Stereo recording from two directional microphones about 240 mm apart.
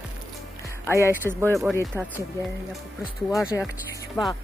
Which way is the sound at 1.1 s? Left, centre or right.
Centre.